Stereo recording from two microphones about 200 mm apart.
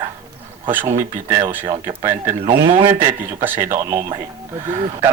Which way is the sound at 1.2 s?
20° right (ahead or behind).